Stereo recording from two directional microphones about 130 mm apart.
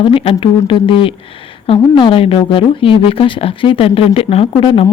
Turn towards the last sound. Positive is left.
turn(degrees=45)  # may be behind; listen again after turning